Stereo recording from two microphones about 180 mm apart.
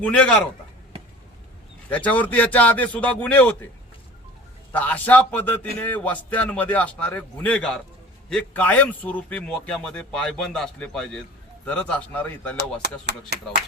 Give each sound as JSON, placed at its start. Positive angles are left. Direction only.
{"t": 0.0, "sound": "a man's voice", "side_deg": 5}
{"t": 1.9, "sound": "a man's voice", "side_deg": 10}
{"t": 4.7, "sound": "a man's voice", "side_deg": 10}
{"t": 12.8, "sound": "speech", "side_deg": -70}